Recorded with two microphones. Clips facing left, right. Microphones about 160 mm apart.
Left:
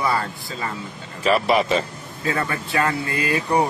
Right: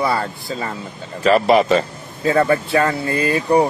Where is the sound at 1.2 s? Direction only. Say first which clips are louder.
Right 5 dB; 40° right (ahead or behind).